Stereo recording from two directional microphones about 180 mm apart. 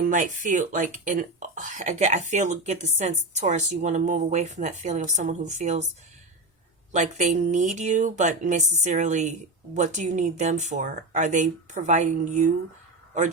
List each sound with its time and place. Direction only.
0.0 s speech: 45° right (ahead or behind)
6.9 s speech: 40° right (ahead or behind)